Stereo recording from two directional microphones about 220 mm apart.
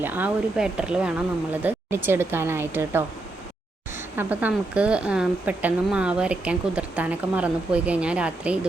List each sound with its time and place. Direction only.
0.0 s a woman's voice: 10° right (ahead or behind)
4.2 s a woman's voice: 5° right (ahead or behind)